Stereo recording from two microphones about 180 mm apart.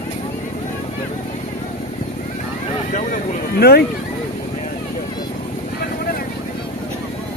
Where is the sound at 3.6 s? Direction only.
60° left (ahead or behind).